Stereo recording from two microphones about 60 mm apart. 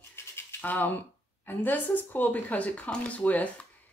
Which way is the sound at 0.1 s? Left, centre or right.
Left.